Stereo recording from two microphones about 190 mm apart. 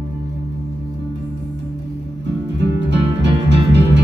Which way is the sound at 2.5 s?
65° right (ahead or behind).